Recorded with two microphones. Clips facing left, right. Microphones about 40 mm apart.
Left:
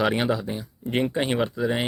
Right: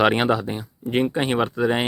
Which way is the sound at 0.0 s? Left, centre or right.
Right.